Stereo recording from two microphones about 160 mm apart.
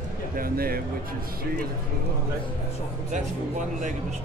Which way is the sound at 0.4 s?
65° right (ahead or behind).